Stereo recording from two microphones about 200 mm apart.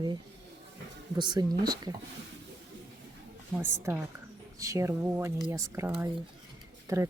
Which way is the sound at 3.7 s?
10° right (ahead or behind).